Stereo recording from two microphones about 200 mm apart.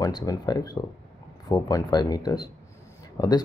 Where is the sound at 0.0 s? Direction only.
20° left (ahead or behind).